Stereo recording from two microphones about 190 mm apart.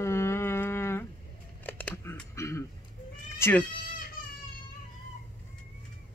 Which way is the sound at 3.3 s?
15° left (ahead or behind).